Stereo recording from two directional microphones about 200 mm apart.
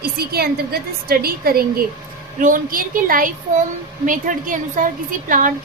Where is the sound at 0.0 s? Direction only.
50° right (ahead or behind).